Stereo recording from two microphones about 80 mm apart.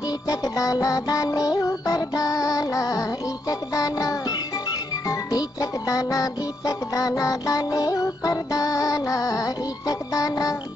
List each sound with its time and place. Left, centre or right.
0.3 s music: left